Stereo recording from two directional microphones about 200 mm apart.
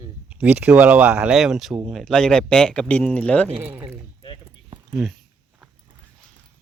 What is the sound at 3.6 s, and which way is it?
Speech, 10° right (ahead or behind).